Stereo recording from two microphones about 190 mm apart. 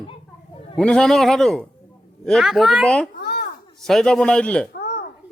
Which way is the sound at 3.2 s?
60° left (ahead or behind).